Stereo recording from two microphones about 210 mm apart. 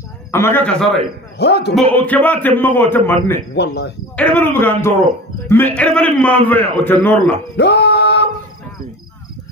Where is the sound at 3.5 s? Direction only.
55° left (ahead or behind).